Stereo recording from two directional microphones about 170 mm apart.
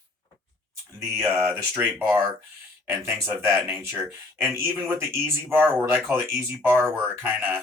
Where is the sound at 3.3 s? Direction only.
15° right (ahead or behind).